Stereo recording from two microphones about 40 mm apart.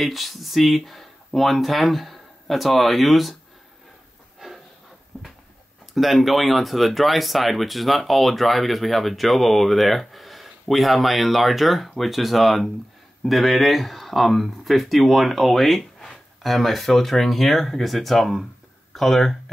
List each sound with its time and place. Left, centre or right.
0.0 s speech: centre
4.4 s a sound: centre
5.9 s speech: centre